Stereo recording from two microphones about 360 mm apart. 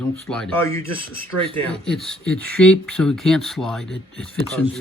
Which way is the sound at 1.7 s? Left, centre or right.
Centre.